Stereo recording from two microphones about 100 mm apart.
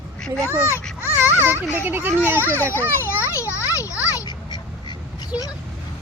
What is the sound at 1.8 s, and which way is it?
Speech, 20° right (ahead or behind).